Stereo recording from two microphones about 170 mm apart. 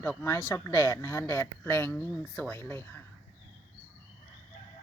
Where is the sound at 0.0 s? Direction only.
15° left (ahead or behind).